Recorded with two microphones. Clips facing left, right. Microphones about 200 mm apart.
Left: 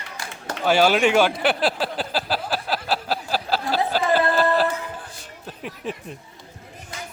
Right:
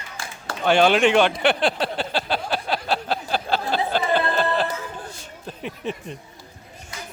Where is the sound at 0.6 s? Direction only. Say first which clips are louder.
Right 1 dB; 5° left (ahead or behind).